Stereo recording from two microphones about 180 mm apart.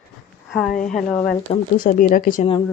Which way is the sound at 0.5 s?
Centre (ahead or behind).